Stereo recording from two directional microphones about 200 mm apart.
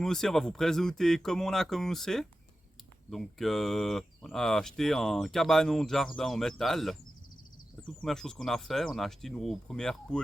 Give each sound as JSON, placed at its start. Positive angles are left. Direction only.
{"t": 0.0, "sound": "speech", "side_deg": 0}
{"t": 8.0, "sound": "speech", "side_deg": 0}